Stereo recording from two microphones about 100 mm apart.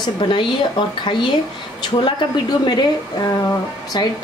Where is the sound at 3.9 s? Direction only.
45° left (ahead or behind).